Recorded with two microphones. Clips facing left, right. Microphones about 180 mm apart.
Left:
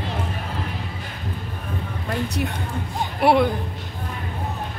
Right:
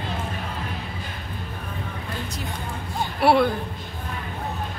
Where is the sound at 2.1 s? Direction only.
65° left (ahead or behind).